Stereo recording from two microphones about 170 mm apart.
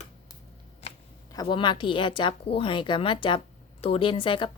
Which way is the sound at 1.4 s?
30° left (ahead or behind).